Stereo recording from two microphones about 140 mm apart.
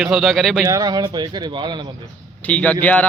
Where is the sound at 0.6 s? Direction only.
25° right (ahead or behind).